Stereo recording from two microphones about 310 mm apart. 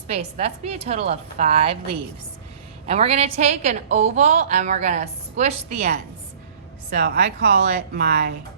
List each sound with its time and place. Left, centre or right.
0.1 s a woman's voice: centre
6.9 s speech: right